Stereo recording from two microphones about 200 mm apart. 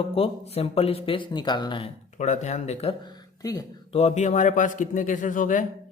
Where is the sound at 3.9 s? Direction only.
30° left (ahead or behind).